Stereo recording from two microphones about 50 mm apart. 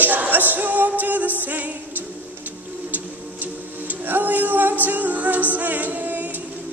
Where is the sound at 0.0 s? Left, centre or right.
Right.